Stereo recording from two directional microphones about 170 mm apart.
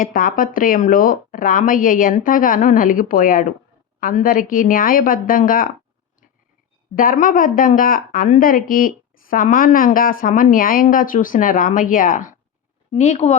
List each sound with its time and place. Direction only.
0.0 s speech: 55° left (ahead or behind)
6.9 s a woman's voice: 55° left (ahead or behind)